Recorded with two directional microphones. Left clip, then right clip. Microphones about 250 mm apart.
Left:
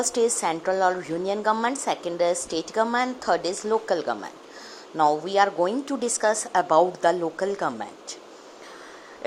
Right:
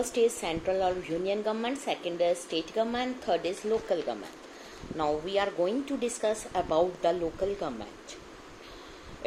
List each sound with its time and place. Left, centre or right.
0.0 s a woman's voice: left